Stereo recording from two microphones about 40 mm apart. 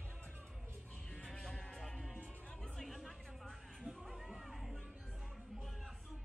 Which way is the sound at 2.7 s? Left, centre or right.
Centre.